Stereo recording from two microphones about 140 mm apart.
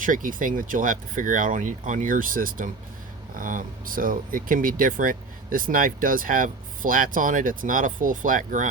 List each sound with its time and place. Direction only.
0.0 s speech: 75° right (ahead or behind)